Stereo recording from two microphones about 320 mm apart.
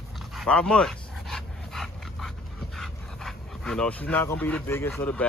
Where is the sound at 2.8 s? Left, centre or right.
Centre.